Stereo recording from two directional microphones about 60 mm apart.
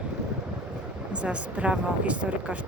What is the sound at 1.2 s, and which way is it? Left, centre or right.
Speech, right.